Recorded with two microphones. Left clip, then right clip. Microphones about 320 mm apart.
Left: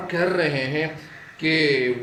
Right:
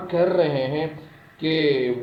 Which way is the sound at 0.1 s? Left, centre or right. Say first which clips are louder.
Right 2 dB; centre.